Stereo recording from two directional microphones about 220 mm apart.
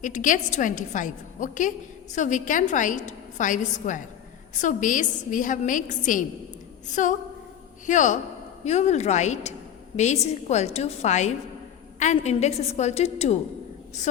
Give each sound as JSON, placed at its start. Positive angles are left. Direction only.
{"t": 0.0, "sound": "a woman's voice", "side_deg": 35}